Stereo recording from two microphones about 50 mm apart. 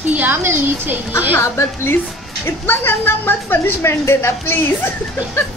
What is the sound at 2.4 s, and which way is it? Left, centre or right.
Speech, left.